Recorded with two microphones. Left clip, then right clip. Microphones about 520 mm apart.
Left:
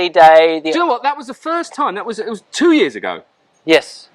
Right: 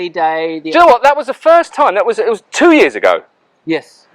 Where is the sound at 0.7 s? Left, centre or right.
Right.